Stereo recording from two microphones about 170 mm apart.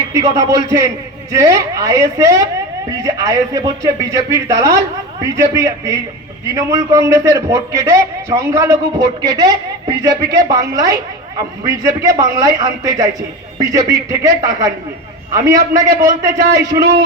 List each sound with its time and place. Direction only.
0.1 s a man's voice: 20° right (ahead or behind)